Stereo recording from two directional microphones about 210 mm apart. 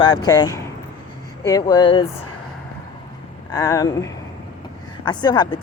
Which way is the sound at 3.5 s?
15° left (ahead or behind).